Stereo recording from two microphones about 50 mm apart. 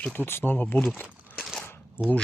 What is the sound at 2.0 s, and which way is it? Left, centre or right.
Speech, left.